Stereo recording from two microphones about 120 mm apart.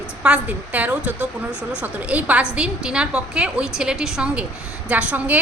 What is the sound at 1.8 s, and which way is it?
A woman's voice, 10° right (ahead or behind).